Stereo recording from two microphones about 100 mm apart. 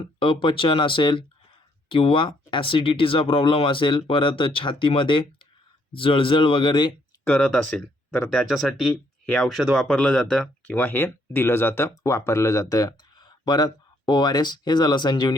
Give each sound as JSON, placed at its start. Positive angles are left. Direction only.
{"t": 0.0, "sound": "speech", "side_deg": 60}
{"t": 7.3, "sound": "speech", "side_deg": 10}
{"t": 8.4, "sound": "speech", "side_deg": 0}
{"t": 9.2, "sound": "speech", "side_deg": 10}
{"t": 9.5, "sound": "speech", "side_deg": 0}
{"t": 10.8, "sound": "speech", "side_deg": 20}